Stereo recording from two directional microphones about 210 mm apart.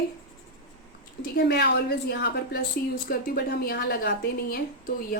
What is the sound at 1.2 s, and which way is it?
A woman's voice, 50° left (ahead or behind).